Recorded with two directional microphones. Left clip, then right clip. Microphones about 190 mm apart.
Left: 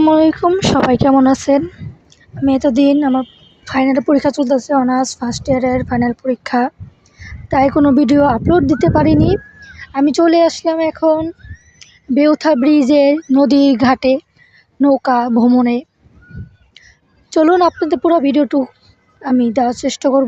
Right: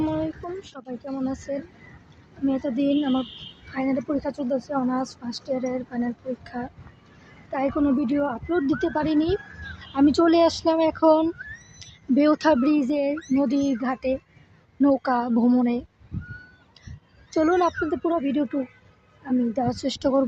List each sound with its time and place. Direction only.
0.0 s a sound: 50° left (ahead or behind)
1.2 s speech: 55° left (ahead or behind); by 9.4 s 35° left (ahead or behind)
9.7 s speech: 25° left (ahead or behind)
11.8 s speech: 25° left (ahead or behind)
12.7 s speech: 35° left (ahead or behind)
17.3 s speech: 30° left (ahead or behind)
19.6 s speech: 30° left (ahead or behind)